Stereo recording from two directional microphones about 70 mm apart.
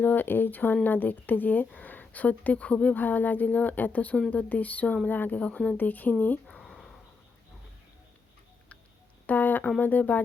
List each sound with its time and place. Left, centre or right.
0.0 s speech: left
6.6 s a sound: centre
9.2 s speech: left